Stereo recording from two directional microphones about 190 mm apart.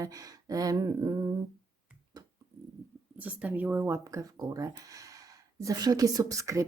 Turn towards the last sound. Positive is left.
turn(degrees=-15)  # may be behind; listen again after turning